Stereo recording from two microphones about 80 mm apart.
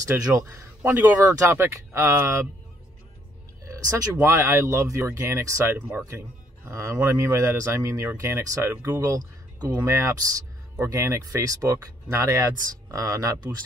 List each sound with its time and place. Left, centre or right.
0.2 s speech: right
3.6 s speech: right
9.0 s speech: right